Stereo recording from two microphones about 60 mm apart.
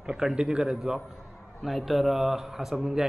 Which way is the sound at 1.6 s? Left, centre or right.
Centre.